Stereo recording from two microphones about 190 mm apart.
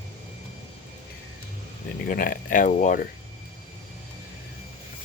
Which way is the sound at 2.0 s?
45° left (ahead or behind).